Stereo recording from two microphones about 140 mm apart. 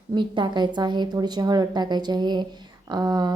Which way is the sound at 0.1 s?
35° right (ahead or behind).